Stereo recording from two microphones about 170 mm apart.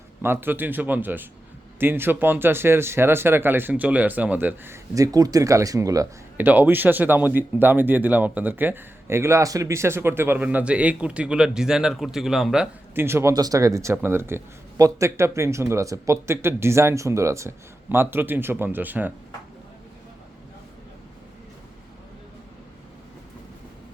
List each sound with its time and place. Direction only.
0.2 s speech: 15° right (ahead or behind)
12.9 s speech: 15° right (ahead or behind)